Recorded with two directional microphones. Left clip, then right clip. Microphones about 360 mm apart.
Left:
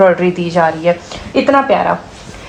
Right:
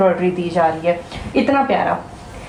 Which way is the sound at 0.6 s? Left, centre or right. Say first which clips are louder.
Left 4 dB; left.